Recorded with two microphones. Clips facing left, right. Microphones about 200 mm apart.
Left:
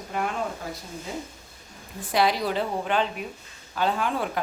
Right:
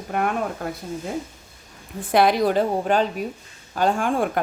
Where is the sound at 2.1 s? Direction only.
55° right (ahead or behind).